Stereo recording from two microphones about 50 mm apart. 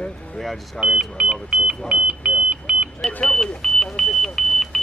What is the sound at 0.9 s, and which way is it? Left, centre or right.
Speech, right.